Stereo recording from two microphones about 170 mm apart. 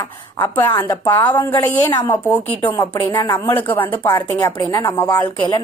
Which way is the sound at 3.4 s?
10° left (ahead or behind).